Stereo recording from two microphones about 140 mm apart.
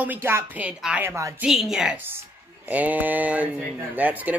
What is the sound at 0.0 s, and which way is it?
Speech, 15° right (ahead or behind).